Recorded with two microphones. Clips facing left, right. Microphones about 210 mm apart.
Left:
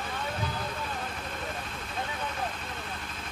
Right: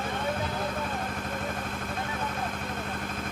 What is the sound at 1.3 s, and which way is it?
Vehicle, 50° right (ahead or behind).